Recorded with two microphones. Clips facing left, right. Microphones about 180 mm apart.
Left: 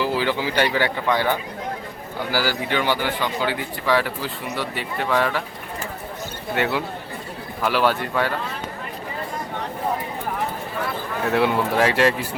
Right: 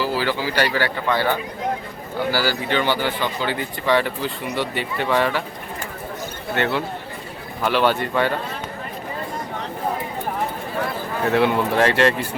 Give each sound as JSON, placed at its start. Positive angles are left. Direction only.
{"t": 0.0, "sound": "speech", "side_deg": 20}
{"t": 6.6, "sound": "speech", "side_deg": 10}
{"t": 11.3, "sound": "speech", "side_deg": 0}